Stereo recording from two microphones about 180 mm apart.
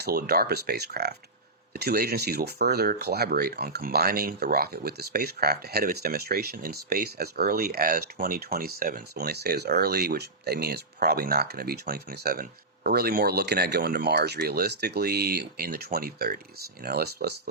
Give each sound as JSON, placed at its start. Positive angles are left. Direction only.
{"t": 0.0, "sound": "speech", "side_deg": -60}